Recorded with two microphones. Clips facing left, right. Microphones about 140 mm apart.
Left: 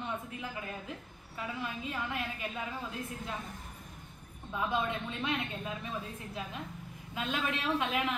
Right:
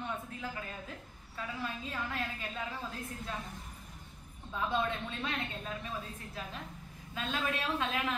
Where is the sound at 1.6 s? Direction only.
15° left (ahead or behind).